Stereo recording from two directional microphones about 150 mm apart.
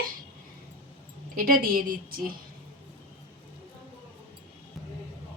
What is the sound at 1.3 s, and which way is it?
Speech, 75° right (ahead or behind).